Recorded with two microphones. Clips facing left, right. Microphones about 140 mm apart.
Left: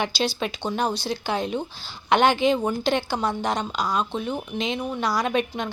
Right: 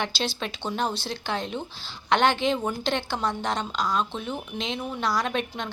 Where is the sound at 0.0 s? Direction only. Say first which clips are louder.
Left 4 dB; 5° left (ahead or behind).